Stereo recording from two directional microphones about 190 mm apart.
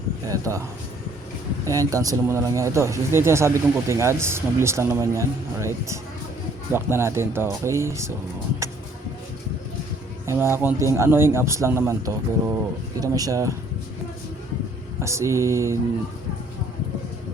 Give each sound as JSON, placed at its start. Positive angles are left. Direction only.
{"t": 0.3, "sound": "speech", "side_deg": -15}
{"t": 1.6, "sound": "speech", "side_deg": -15}
{"t": 10.2, "sound": "speech", "side_deg": -15}
{"t": 15.0, "sound": "speech", "side_deg": -15}